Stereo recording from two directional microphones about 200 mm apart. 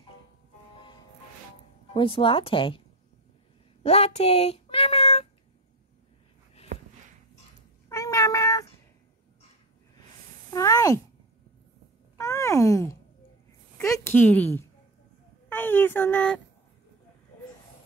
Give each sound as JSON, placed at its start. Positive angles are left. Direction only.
{"t": 0.7, "sound": "music", "side_deg": 25}
{"t": 2.0, "sound": "speech", "side_deg": 25}
{"t": 3.8, "sound": "meow", "side_deg": 30}
{"t": 7.9, "sound": "cat", "side_deg": 15}
{"t": 10.5, "sound": "a sound", "side_deg": 15}
{"t": 12.2, "sound": "a sound", "side_deg": 15}
{"t": 13.7, "sound": "a woman's voice", "side_deg": 15}